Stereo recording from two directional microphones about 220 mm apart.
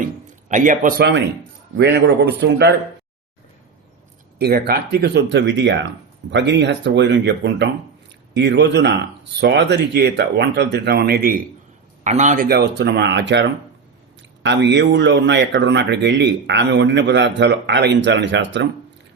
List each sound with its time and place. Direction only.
0.4 s speech: 35° right (ahead or behind)
4.4 s speech: 45° right (ahead or behind)